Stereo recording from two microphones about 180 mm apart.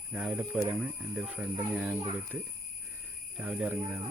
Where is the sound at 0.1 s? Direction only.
5° right (ahead or behind).